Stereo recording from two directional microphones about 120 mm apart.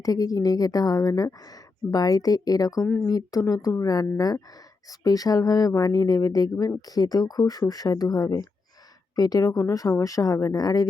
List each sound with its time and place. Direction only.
0.0 s speech: 30° left (ahead or behind)